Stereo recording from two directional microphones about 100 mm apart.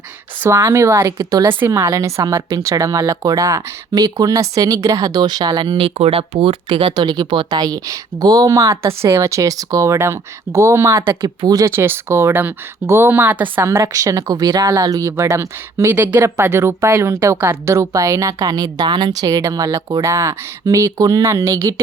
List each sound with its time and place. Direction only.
0.4 s speech: 25° right (ahead or behind)
1.5 s speech: 25° right (ahead or behind)
11.1 s speech: 45° right (ahead or behind)
11.7 s speech: 25° right (ahead or behind)